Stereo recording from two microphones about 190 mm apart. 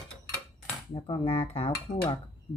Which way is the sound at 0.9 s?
30° left (ahead or behind).